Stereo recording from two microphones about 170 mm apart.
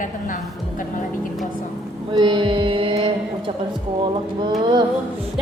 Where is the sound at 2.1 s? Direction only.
25° right (ahead or behind).